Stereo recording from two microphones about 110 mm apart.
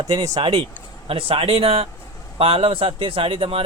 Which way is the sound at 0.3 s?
50° right (ahead or behind).